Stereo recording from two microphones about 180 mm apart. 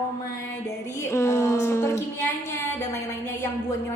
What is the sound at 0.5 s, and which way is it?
A woman's voice, 15° left (ahead or behind).